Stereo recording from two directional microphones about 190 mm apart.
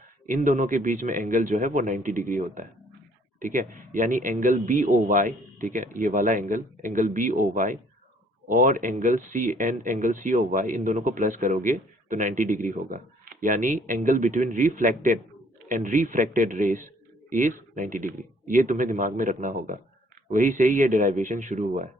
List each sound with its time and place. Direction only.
0.3 s a man's voice: 40° right (ahead or behind)